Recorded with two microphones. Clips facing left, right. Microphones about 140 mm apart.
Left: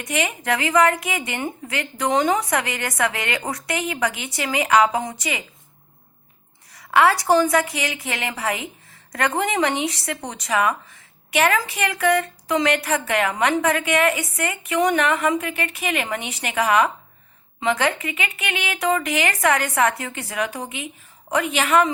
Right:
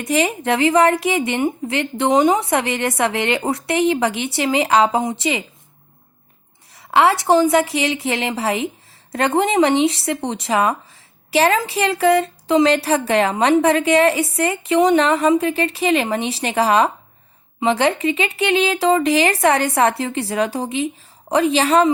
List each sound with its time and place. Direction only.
0.0 s speech: 30° right (ahead or behind)
6.7 s speech: 25° right (ahead or behind)